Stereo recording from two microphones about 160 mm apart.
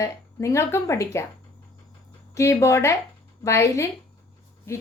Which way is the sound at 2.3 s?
15° left (ahead or behind).